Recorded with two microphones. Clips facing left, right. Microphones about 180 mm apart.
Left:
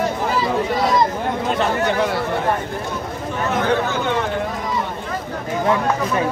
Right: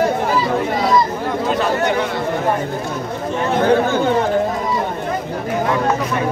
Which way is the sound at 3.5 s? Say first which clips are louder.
Right 5 dB; 30° right (ahead or behind).